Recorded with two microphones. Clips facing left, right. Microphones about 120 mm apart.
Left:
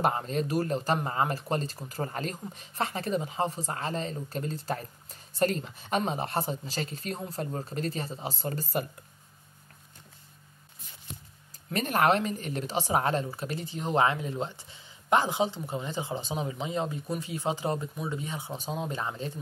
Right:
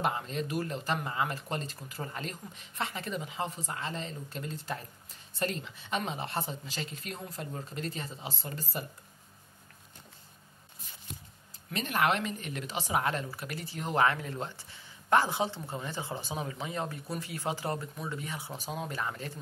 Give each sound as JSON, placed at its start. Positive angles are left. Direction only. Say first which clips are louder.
{"t": 0.0, "sound": "speech", "louder": "left 4 dB", "side_deg": 40}
{"t": 11.7, "sound": "speech", "louder": "left 4 dB", "side_deg": 45}